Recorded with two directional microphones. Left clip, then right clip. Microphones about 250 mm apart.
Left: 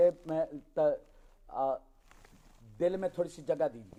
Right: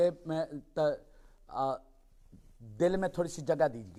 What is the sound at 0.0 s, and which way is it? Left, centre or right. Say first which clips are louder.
A man's voice: left 2 dB; right.